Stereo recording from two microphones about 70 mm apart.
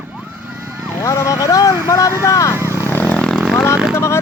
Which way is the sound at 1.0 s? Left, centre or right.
Left.